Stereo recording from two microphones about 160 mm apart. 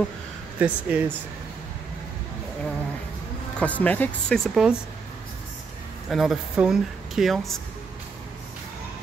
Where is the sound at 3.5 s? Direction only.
10° left (ahead or behind).